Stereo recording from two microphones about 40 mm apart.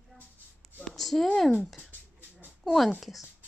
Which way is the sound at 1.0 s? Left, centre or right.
Centre.